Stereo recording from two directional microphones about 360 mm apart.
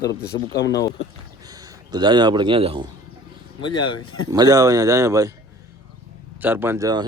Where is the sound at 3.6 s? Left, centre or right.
Centre.